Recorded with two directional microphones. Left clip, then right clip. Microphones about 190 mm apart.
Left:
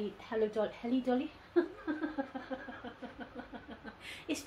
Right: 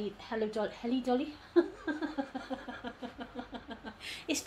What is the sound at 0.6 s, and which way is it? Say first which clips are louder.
A woman's voice: even; 35° right (ahead or behind).